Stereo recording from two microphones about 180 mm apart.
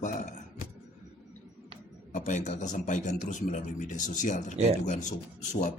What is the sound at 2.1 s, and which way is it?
A man's voice, 45° left (ahead or behind).